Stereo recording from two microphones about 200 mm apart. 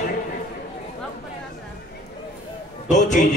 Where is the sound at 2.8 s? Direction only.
35° left (ahead or behind).